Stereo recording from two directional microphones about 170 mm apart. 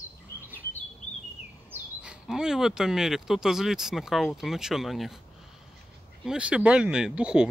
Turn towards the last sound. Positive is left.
turn(degrees=-5)  # may be behind; listen again after turning